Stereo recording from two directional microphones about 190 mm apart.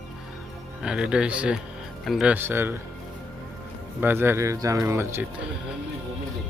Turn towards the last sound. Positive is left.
turn(degrees=-15)  # may be behind; listen again after turning